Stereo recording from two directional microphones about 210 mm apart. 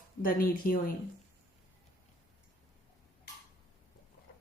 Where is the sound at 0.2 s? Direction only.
40° left (ahead or behind).